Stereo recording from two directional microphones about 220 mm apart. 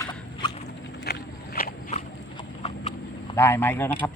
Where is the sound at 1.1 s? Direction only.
45° left (ahead or behind).